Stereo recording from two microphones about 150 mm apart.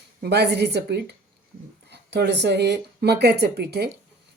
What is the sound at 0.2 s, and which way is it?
Speech, 90° right.